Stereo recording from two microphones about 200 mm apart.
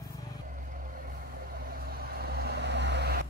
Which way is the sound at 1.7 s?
50° right (ahead or behind).